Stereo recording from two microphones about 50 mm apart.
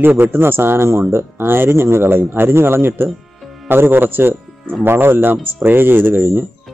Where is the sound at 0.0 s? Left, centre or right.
Right.